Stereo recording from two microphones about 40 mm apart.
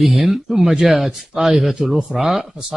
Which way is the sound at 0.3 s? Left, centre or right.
Centre.